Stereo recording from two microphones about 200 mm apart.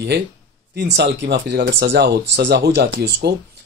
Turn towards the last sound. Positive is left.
turn(degrees=-55)  # may be behind; listen again after turning